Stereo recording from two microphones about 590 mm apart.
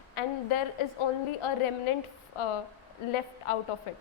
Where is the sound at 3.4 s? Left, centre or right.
Left.